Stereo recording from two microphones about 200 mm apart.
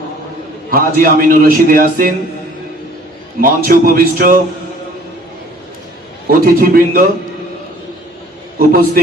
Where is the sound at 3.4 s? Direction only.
45° right (ahead or behind).